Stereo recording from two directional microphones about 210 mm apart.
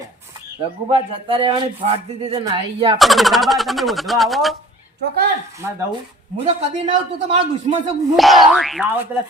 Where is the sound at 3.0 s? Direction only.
Centre (ahead or behind).